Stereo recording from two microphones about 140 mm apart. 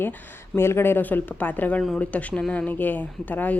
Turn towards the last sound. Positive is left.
turn(degrees=10)  # may be behind; listen again after turning